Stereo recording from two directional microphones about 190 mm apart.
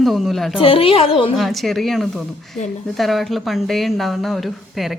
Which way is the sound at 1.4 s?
Centre (ahead or behind).